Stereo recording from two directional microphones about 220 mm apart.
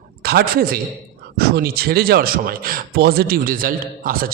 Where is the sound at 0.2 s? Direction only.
45° right (ahead or behind).